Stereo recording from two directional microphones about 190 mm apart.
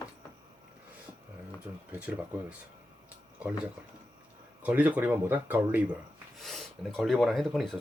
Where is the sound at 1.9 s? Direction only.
5° right (ahead or behind).